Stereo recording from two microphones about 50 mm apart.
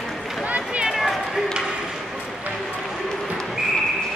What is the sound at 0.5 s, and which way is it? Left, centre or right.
Run, right.